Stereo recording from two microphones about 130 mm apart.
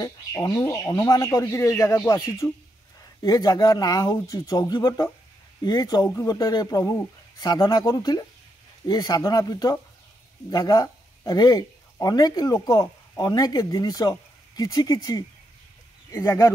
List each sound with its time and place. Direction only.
0.0 s speech: 25° left (ahead or behind)